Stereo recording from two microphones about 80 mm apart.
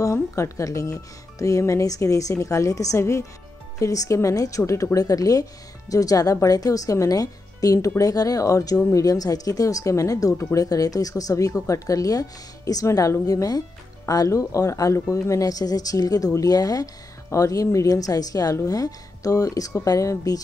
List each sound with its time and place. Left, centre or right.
0.0 s speech: left